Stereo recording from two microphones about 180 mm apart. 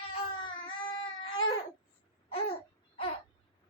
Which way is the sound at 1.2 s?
90° left.